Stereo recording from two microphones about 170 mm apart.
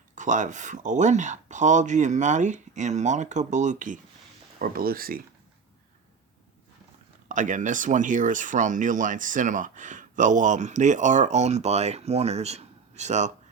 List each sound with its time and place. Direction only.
0.2 s speech: 45° right (ahead or behind)
7.3 s speech: 50° right (ahead or behind)